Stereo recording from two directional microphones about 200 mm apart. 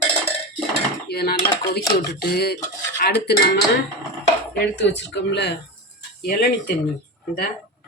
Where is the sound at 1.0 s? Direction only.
50° left (ahead or behind).